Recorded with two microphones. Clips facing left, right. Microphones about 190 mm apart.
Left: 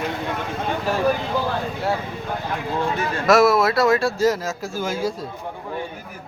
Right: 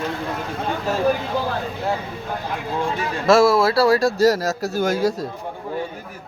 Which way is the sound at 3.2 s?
30° right (ahead or behind).